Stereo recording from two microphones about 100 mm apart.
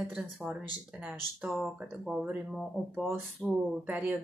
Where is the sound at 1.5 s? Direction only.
Centre (ahead or behind).